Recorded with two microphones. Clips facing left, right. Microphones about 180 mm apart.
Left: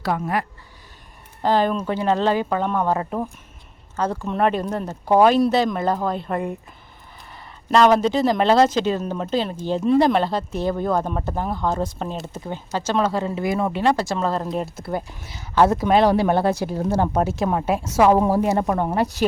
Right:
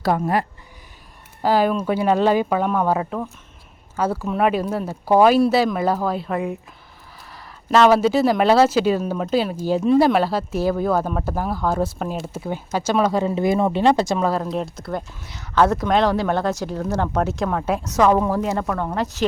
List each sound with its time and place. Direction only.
0.0 s speech: 35° right (ahead or behind)
1.4 s speech: 10° right (ahead or behind)
14.5 s speech: 5° left (ahead or behind)
18.4 s speech: 20° left (ahead or behind)